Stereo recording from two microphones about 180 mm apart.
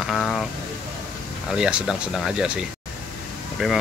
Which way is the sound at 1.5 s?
5° right (ahead or behind).